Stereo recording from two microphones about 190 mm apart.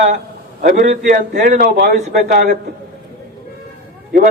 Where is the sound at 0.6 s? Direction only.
45° right (ahead or behind).